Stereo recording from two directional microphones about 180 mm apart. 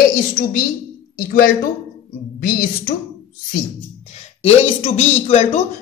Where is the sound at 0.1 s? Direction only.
50° left (ahead or behind).